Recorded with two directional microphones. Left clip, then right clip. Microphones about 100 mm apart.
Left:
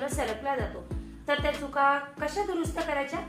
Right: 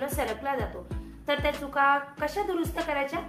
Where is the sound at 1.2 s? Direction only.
15° right (ahead or behind).